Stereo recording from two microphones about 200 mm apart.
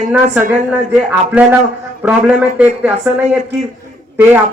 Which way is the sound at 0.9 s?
10° right (ahead or behind).